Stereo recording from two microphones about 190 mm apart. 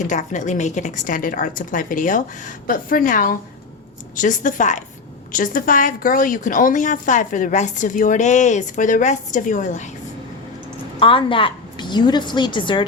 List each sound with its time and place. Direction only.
0.0 s a woman's voice: 40° left (ahead or behind)
11.0 s a woman's voice: 25° left (ahead or behind)